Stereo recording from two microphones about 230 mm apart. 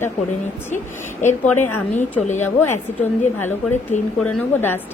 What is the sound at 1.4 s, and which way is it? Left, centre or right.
Speech, centre.